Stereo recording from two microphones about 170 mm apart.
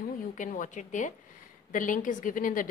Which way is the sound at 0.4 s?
50° left (ahead or behind).